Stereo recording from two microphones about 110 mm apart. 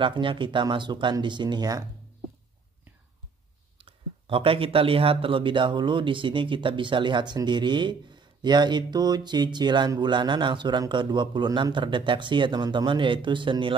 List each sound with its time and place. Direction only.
0.0 s speech: 50° right (ahead or behind)
3.7 s speech: 55° right (ahead or behind)